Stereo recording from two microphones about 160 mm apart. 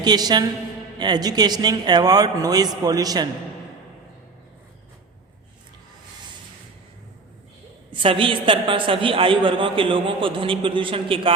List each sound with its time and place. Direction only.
0.0 s a man's voice: 25° right (ahead or behind)
7.9 s a woman's voice: 30° right (ahead or behind)